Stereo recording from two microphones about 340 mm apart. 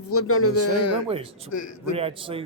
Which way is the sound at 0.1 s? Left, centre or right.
Left.